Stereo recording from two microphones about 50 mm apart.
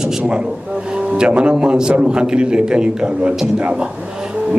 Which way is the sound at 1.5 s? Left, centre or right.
Centre.